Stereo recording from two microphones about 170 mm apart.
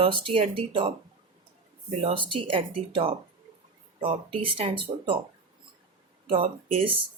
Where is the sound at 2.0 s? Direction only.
30° right (ahead or behind).